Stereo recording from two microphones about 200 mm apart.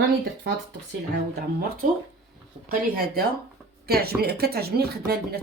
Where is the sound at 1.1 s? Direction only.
55° right (ahead or behind).